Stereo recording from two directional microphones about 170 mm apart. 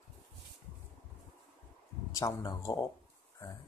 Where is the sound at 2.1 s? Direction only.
20° left (ahead or behind).